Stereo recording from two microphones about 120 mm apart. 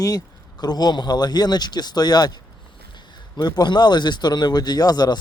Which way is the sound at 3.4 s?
35° left (ahead or behind).